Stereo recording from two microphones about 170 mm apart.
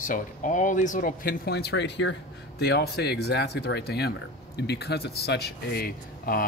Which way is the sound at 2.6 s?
70° left (ahead or behind).